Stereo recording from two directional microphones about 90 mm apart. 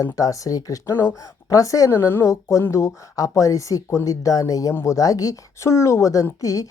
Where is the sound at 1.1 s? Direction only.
40° left (ahead or behind).